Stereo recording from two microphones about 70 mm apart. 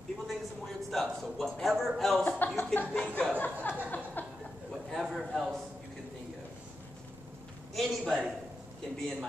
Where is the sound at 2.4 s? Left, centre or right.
Left.